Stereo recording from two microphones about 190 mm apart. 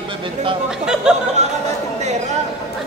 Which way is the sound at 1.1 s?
5° right (ahead or behind).